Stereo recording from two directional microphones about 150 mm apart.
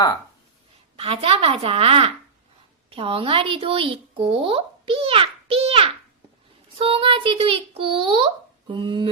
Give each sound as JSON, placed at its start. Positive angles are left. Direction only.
{"t": 0.9, "sound": "speech", "side_deg": -40}